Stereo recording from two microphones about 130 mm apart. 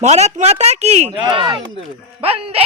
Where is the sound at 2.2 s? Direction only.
50° right (ahead or behind).